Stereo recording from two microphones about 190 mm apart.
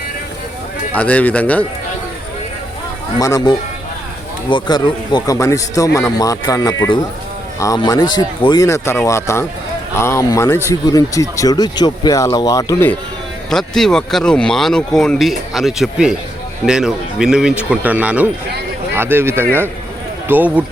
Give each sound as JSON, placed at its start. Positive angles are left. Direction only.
{"t": 0.9, "sound": "speech", "side_deg": 10}
{"t": 3.2, "sound": "speech", "side_deg": 20}
{"t": 13.5, "sound": "a man's voice", "side_deg": 0}